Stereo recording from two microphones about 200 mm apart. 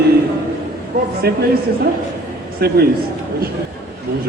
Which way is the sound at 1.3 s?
50° right (ahead or behind).